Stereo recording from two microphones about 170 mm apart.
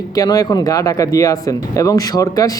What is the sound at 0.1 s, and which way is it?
Speech, 20° left (ahead or behind).